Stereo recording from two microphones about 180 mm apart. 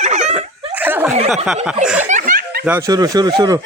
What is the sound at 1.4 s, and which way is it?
Speech, 5° right (ahead or behind).